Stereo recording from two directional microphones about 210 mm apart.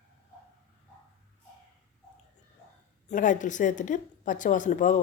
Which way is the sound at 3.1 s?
35° left (ahead or behind).